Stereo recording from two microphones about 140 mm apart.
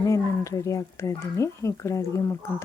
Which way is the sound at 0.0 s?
20° left (ahead or behind).